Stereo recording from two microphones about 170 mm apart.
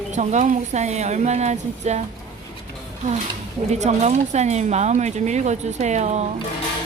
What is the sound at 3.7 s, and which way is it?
Speech, 40° right (ahead or behind).